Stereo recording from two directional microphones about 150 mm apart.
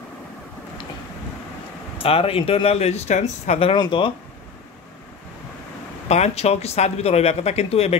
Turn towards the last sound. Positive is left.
turn(degrees=45)  # may be behind; listen again after turning